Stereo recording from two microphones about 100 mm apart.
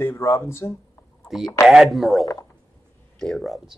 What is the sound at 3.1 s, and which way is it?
Speech, centre (ahead or behind).